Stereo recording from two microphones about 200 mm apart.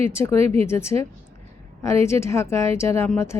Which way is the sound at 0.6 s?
15° left (ahead or behind).